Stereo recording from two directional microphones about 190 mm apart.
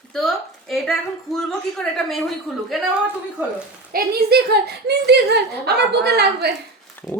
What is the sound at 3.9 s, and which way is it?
Speech, 55° right (ahead or behind).